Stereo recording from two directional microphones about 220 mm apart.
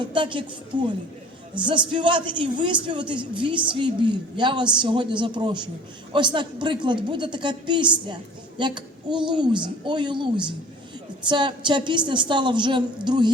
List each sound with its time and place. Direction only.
0.0 s a man's voice: 20° right (ahead or behind)